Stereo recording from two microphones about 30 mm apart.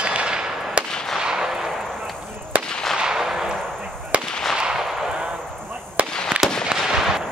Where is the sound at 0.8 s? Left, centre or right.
Right.